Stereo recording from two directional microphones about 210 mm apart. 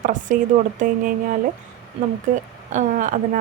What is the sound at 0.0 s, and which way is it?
A woman's voice, 40° right (ahead or behind).